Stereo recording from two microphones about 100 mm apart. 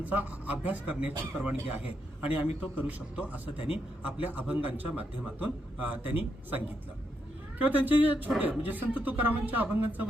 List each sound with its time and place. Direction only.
0.0 s a man's voice: 15° right (ahead or behind)
7.6 s a man's voice: 15° right (ahead or behind)